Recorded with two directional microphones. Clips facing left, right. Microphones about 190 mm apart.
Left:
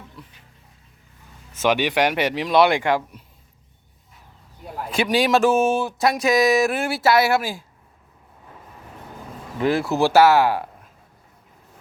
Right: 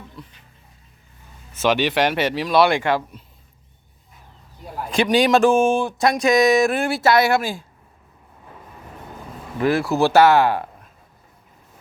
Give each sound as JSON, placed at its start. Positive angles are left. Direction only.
{"t": 0.2, "sound": "speech", "side_deg": 5}
{"t": 1.6, "sound": "speech", "side_deg": 15}
{"t": 4.9, "sound": "speech", "side_deg": 5}
{"t": 9.6, "sound": "speech", "side_deg": 20}
{"t": 10.1, "sound": "speech", "side_deg": 5}